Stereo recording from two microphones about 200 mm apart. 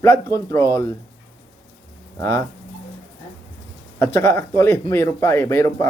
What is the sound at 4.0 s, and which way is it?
A man's voice, 10° left (ahead or behind).